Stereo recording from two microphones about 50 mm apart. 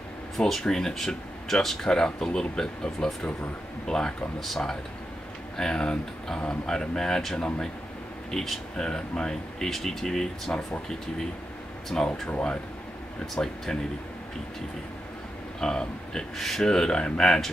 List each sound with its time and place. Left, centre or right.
0.7 s speech: centre
13.3 s speech: centre
15.6 s speech: centre